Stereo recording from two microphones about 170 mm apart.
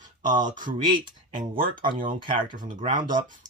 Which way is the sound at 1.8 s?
55° right (ahead or behind).